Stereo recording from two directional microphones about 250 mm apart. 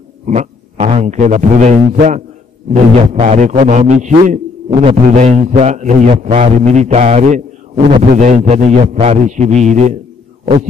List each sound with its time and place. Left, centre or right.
0.3 s a man's voice: right